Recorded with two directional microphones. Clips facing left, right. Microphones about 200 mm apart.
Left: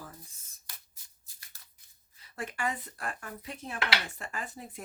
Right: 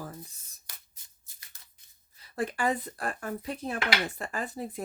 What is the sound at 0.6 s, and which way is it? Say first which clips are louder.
Shuffling cards: right 1 dB; 20° right (ahead or behind).